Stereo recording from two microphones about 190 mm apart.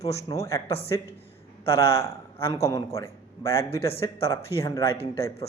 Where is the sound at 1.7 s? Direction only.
15° left (ahead or behind).